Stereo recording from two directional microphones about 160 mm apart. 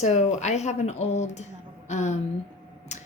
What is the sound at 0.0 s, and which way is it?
A woman's voice, 45° left (ahead or behind).